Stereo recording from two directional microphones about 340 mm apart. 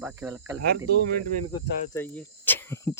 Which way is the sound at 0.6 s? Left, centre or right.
Right.